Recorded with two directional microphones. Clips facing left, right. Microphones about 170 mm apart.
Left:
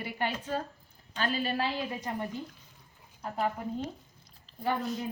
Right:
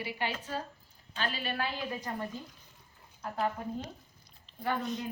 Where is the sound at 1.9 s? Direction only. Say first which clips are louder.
Left 2 dB; 20° left (ahead or behind).